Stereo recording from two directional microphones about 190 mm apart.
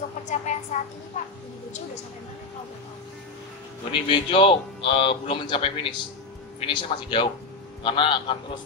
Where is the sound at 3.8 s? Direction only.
30° left (ahead or behind).